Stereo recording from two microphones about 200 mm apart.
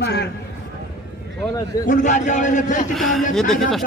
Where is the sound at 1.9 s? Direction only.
35° left (ahead or behind).